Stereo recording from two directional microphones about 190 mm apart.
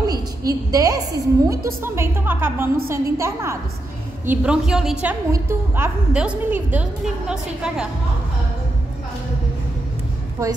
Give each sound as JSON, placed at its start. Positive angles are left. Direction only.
{"t": 0.4, "sound": "a woman's voice", "side_deg": -20}